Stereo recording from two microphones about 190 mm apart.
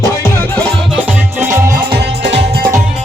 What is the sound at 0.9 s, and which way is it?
Music, 10° right (ahead or behind).